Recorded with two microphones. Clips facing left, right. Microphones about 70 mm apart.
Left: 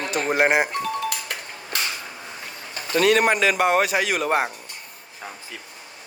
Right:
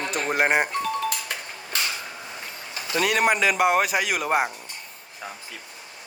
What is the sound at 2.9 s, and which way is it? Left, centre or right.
Speech, centre.